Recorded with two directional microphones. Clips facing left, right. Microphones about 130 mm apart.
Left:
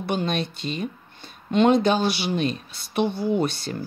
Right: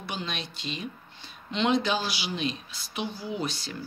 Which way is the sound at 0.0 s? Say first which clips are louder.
Left 10 dB; 50° left (ahead or behind).